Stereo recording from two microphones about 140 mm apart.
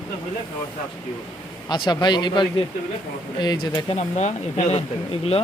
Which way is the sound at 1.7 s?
30° left (ahead or behind).